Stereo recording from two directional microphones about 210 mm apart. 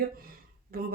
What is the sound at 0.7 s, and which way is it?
Speech, 45° right (ahead or behind).